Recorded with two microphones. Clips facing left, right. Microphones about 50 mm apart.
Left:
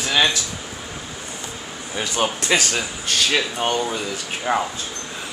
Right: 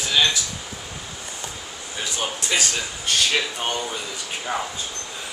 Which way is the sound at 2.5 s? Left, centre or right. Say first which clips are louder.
Left 4 dB; left.